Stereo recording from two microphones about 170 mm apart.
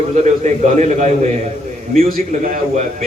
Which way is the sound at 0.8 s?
45° right (ahead or behind).